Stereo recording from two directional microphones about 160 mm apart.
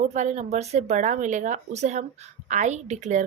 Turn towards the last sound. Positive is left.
turn(degrees=-50)  # may be behind; listen again after turning